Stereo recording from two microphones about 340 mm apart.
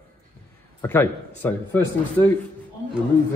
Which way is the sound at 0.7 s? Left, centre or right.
Centre.